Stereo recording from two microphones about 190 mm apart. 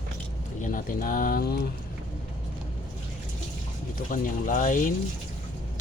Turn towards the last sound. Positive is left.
turn(degrees=45)  # may be behind; listen again after turning